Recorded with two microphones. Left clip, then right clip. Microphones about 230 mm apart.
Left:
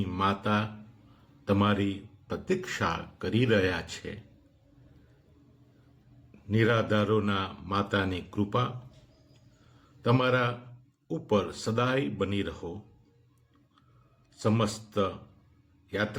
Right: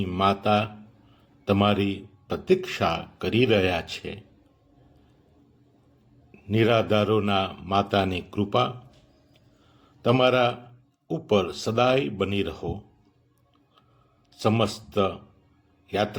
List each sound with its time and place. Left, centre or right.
0.0 s speech: centre
6.5 s speech: centre
10.0 s speech: centre
14.4 s speech: centre